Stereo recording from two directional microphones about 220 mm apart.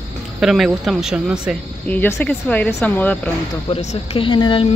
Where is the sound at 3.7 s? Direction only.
25° left (ahead or behind).